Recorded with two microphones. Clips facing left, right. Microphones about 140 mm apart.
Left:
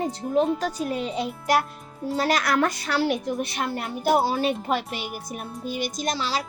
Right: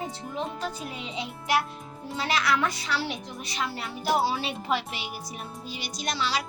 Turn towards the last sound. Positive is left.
turn(degrees=40)  # may be behind; listen again after turning